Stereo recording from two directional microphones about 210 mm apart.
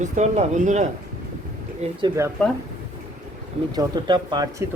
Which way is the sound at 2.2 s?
15° right (ahead or behind).